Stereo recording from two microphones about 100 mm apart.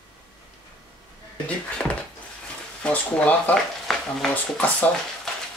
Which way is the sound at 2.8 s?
10° left (ahead or behind).